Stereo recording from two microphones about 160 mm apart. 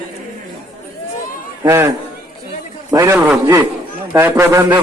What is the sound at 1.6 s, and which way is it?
Speech, 20° right (ahead or behind).